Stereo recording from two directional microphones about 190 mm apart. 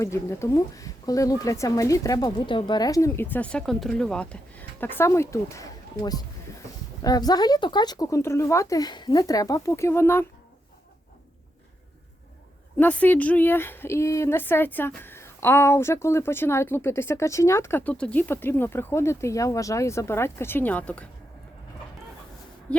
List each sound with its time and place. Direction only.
0.0 s a woman's voice: 15° left (ahead or behind)
12.8 s a woman's voice: 10° left (ahead or behind)
22.7 s speech: 5° left (ahead or behind)